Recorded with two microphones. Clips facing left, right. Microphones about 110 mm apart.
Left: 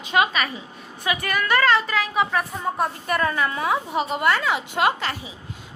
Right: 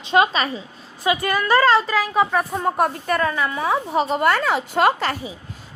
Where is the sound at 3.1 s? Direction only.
25° right (ahead or behind).